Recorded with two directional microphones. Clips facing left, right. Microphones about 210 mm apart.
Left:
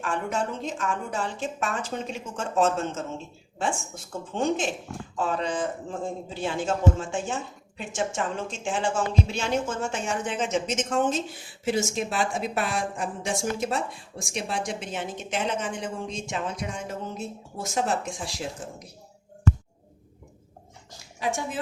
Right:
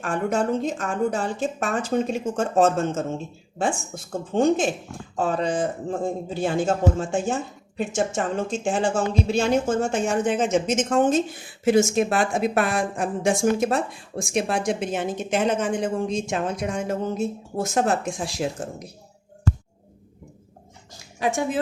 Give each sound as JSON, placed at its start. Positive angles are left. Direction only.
{"t": 0.0, "sound": "a man's voice", "side_deg": -45}
{"t": 21.2, "sound": "speech", "side_deg": -60}